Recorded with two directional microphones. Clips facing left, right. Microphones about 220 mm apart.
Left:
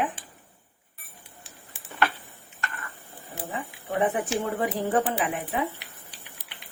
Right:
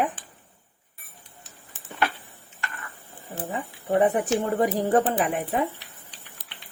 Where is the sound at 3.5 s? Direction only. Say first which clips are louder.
Right 5 dB; 35° right (ahead or behind).